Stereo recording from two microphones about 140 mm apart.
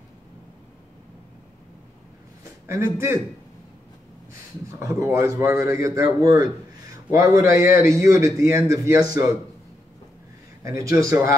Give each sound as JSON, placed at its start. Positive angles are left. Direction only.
{"t": 2.6, "sound": "a man's voice", "side_deg": -20}
{"t": 4.3, "sound": "a man's voice", "side_deg": -20}
{"t": 10.6, "sound": "a man's voice", "side_deg": -20}